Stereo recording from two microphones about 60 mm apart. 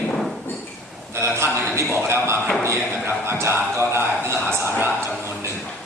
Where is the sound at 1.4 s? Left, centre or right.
Right.